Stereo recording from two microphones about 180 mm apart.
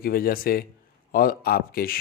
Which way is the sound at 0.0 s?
55° left (ahead or behind).